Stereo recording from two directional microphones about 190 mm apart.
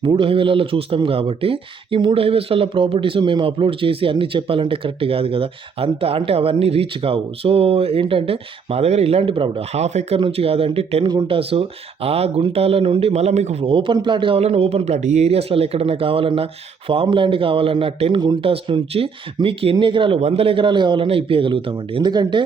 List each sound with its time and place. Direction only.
0.0 s a man's voice: 25° right (ahead or behind)